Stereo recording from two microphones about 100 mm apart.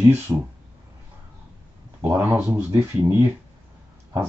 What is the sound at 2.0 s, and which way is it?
Speech, 20° right (ahead or behind).